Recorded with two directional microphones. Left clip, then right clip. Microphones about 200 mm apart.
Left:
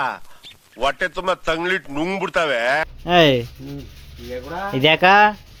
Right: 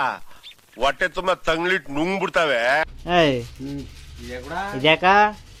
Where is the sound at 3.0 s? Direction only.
10° left (ahead or behind).